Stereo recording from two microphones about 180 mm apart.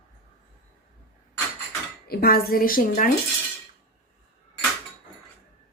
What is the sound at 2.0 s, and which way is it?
A woman's voice, 55° left (ahead or behind).